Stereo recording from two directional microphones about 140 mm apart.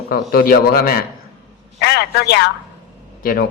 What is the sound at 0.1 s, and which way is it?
Speech, 90° left.